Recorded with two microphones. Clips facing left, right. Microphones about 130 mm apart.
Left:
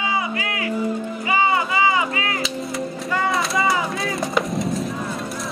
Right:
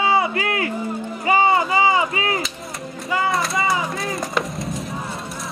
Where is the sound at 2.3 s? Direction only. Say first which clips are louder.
Left 3 dB; centre (ahead or behind).